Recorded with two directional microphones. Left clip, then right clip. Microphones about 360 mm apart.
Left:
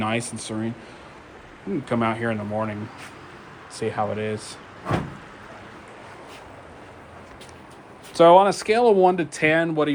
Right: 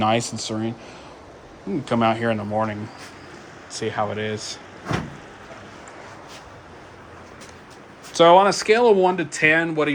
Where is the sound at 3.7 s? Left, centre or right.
Centre.